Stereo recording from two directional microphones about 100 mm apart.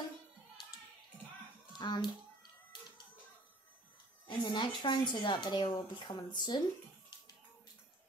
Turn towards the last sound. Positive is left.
turn(degrees=50)  # may be behind; listen again after turning